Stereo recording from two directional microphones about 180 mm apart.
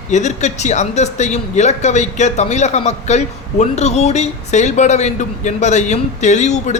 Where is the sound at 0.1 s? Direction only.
40° left (ahead or behind).